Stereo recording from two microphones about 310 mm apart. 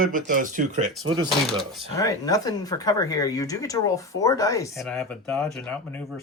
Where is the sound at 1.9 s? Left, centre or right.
Centre.